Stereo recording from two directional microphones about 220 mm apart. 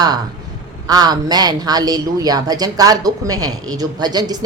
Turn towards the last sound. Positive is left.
turn(degrees=-20)  # may be behind; listen again after turning